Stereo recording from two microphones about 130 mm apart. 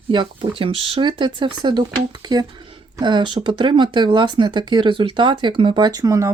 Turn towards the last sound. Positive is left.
turn(degrees=-25)  # may be behind; listen again after turning